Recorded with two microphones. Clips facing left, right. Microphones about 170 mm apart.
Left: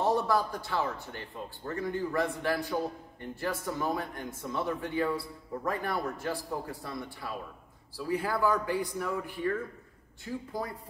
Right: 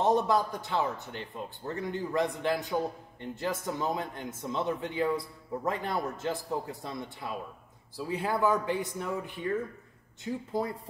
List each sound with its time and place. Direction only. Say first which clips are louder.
0.0 s a man's voice: right 2 dB; 20° right (ahead or behind)